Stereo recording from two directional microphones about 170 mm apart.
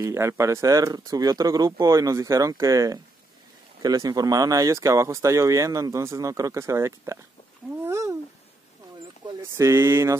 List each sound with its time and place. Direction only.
0.0 s speech: 15° right (ahead or behind)
9.4 s speech: 15° right (ahead or behind)